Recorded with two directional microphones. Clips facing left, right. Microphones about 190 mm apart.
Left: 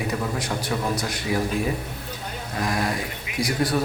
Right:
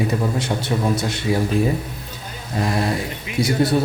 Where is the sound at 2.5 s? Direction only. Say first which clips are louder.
Right 4 dB; 25° right (ahead or behind).